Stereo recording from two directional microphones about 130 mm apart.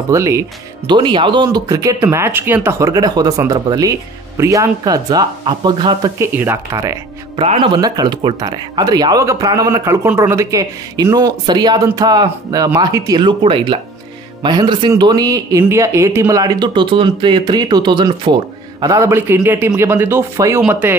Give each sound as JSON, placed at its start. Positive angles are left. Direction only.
{"t": 0.1, "sound": "speech", "side_deg": -25}
{"t": 0.8, "sound": "speech", "side_deg": -35}
{"t": 2.8, "sound": "speech", "side_deg": -30}
{"t": 6.1, "sound": "speech", "side_deg": -20}
{"t": 7.3, "sound": "speech", "side_deg": -45}
{"t": 7.8, "sound": "speech", "side_deg": -30}
{"t": 13.2, "sound": "speech", "side_deg": -40}